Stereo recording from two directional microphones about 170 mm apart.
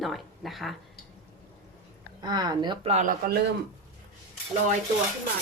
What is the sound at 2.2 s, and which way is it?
Speech, 25° right (ahead or behind).